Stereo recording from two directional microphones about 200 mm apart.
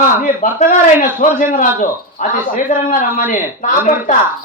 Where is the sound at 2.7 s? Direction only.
40° left (ahead or behind).